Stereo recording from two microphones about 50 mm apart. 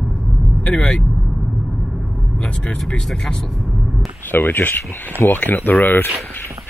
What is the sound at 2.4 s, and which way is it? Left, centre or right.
Vehicle, left.